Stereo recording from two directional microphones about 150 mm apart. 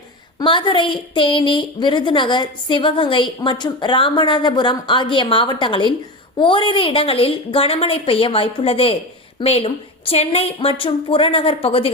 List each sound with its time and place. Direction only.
0.3 s a woman's voice: 30° left (ahead or behind)